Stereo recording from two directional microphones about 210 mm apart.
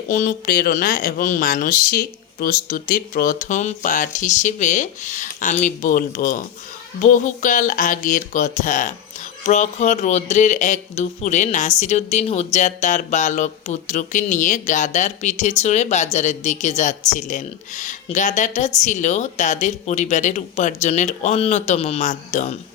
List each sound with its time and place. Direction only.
0.1 s speech: 40° left (ahead or behind)